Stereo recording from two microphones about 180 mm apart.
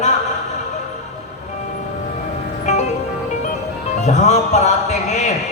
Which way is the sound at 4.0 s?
40° left (ahead or behind).